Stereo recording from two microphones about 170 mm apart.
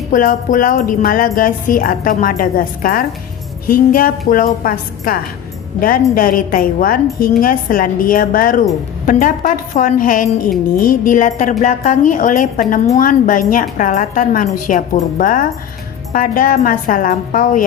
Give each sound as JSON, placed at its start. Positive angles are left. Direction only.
{"t": 0.1, "sound": "a woman's voice", "side_deg": 50}